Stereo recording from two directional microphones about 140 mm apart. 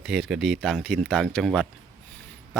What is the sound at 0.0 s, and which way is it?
Speech, centre (ahead or behind).